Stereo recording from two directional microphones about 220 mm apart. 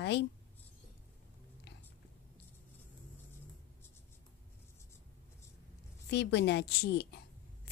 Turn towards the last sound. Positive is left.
turn(degrees=50)  # may be behind; listen again after turning